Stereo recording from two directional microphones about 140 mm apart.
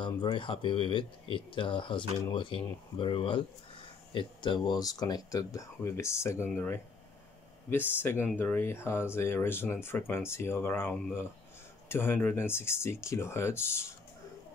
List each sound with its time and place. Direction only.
0.0 s speech: 35° left (ahead or behind); by 13.9 s 20° left (ahead or behind)